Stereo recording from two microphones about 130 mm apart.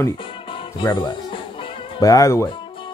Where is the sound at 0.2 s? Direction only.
40° left (ahead or behind).